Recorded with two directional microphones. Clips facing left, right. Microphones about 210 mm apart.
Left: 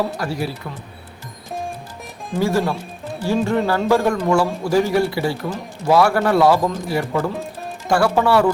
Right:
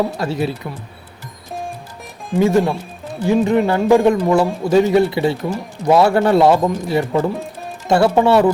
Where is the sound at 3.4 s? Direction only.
20° right (ahead or behind).